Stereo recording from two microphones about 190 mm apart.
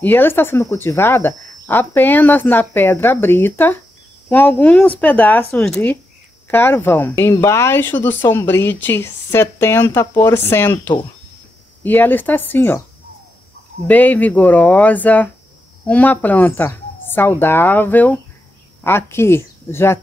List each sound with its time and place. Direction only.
0.0 s speech: 10° left (ahead or behind)
13.8 s speech: 10° left (ahead or behind)